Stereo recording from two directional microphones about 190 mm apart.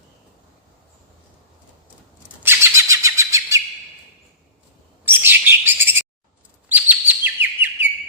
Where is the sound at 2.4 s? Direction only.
15° right (ahead or behind).